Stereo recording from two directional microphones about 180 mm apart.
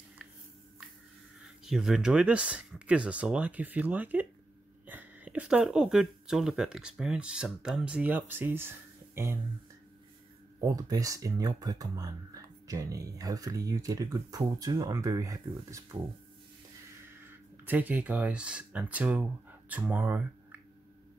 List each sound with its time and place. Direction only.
1.6 s speech: 5° right (ahead or behind)
10.6 s speech: 20° right (ahead or behind)
17.6 s speech: 10° right (ahead or behind)